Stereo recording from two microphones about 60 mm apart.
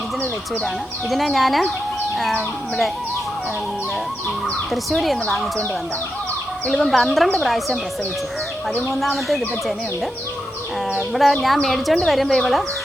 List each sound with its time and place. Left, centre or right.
1.1 s speech: centre
4.7 s speech: centre
6.7 s speech: centre
8.9 s speech: centre
10.9 s speech: centre